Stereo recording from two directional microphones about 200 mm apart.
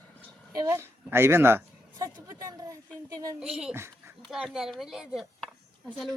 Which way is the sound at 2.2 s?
15° right (ahead or behind).